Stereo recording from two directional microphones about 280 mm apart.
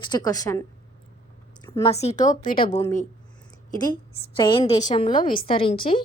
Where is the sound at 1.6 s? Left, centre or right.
Centre.